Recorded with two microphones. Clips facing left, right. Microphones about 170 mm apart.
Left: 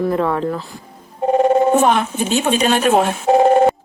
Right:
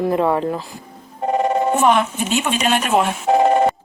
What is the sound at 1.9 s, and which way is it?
A woman's voice, 35° left (ahead or behind).